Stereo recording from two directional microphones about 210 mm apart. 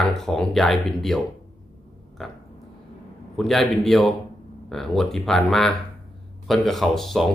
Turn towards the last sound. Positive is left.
turn(degrees=0)  # may be behind; listen again after turning